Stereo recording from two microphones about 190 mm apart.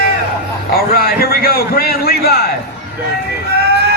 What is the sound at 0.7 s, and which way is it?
A man's voice, 50° left (ahead or behind).